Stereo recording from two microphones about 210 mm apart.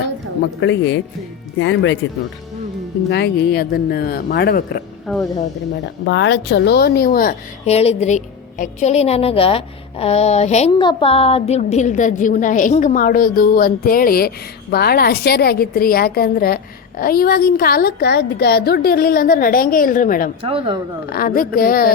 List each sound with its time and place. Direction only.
0.6 s speech: 55° left (ahead or behind)
3.1 s a woman's voice: 50° left (ahead or behind)
5.0 s speech: centre (ahead or behind)
6.1 s a woman's voice: 55° left (ahead or behind); by 20.3 s 40° left (ahead or behind)
20.4 s speech: 25° right (ahead or behind)
21.1 s a woman's voice: 45° left (ahead or behind)